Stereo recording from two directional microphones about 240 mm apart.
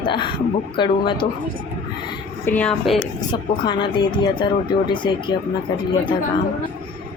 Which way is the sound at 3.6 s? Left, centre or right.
Centre.